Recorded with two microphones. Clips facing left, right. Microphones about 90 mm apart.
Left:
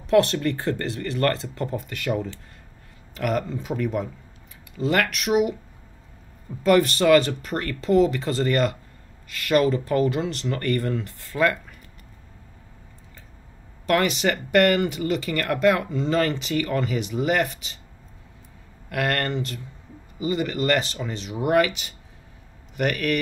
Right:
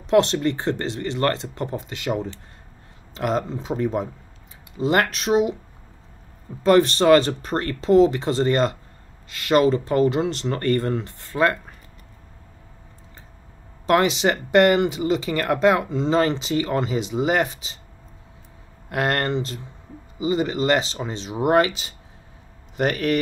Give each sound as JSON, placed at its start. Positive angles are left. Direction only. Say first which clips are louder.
{"t": 0.0, "sound": "speech", "louder": "right 1 dB", "side_deg": -25}
{"t": 6.6, "sound": "speech", "louder": "right 2 dB", "side_deg": -30}
{"t": 13.8, "sound": "speech", "louder": "right 3 dB", "side_deg": -25}
{"t": 18.9, "sound": "speech", "louder": "right 2 dB", "side_deg": -25}